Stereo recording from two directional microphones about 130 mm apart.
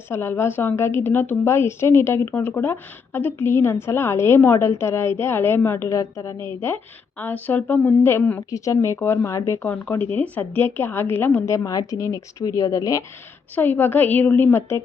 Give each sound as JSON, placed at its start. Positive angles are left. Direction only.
{"t": 0.1, "sound": "a woman's voice", "side_deg": 20}
{"t": 7.2, "sound": "a woman's voice", "side_deg": 15}